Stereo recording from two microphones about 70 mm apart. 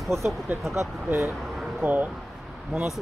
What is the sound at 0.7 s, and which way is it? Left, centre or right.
Speech, right.